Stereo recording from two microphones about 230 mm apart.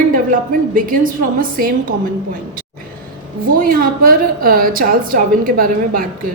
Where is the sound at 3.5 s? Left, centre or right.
Right.